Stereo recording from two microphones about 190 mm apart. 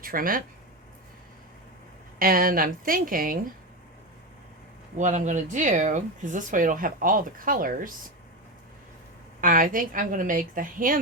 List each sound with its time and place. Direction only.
0.0 s speech: 50° right (ahead or behind)
2.1 s speech: 50° right (ahead or behind)
4.9 s speech: 40° right (ahead or behind)
9.4 s speech: 45° right (ahead or behind)